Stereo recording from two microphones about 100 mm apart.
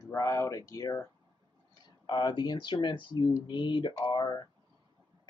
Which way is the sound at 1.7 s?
45° left (ahead or behind).